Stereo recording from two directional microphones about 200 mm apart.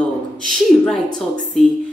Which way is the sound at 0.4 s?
Centre (ahead or behind).